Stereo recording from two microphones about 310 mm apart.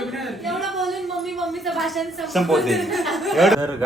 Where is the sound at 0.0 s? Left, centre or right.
Centre.